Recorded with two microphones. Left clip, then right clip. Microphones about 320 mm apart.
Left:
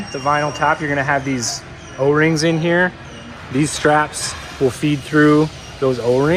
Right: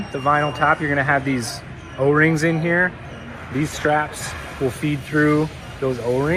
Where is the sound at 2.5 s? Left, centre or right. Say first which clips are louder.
Left 3 dB; left.